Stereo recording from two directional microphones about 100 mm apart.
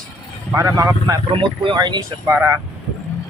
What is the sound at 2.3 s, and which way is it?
Speech, 25° right (ahead or behind).